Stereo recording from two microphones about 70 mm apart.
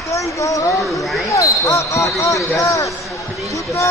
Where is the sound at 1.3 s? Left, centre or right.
Left.